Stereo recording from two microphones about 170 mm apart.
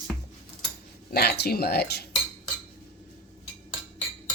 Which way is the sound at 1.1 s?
65° left (ahead or behind).